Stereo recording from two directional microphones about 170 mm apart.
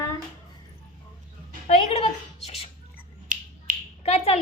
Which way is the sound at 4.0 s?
40° left (ahead or behind).